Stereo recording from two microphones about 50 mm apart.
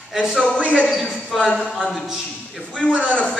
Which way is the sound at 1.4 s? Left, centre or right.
Centre.